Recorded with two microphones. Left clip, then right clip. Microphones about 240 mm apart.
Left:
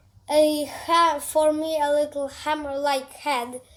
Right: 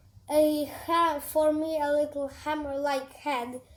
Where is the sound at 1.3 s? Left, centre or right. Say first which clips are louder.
Left 4 dB; left.